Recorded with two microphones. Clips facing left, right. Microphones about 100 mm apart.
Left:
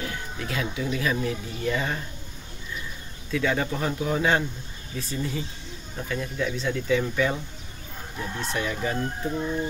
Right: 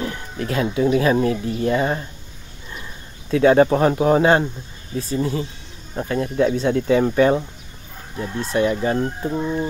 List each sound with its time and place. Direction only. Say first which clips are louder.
0.0 s music: right 6 dB; 40° right (ahead or behind)
0.9 s speech: right 7 dB; 45° right (ahead or behind)
3.3 s speech: right 12 dB; 50° right (ahead or behind)
4.2 s speech: right 8 dB; 40° right (ahead or behind)
8.2 s speech: right 9 dB; 35° right (ahead or behind)